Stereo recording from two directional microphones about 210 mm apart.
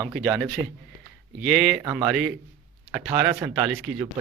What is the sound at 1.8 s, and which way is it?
Speech, 20° right (ahead or behind).